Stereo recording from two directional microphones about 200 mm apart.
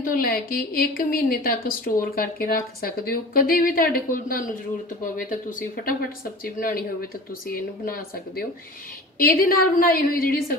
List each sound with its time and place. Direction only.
0.0 s a woman's voice: 45° left (ahead or behind)